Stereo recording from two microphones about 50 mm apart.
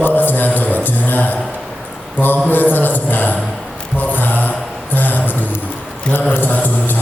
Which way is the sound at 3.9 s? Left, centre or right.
Left.